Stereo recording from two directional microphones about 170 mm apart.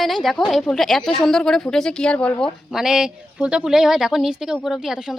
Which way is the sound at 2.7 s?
5° right (ahead or behind).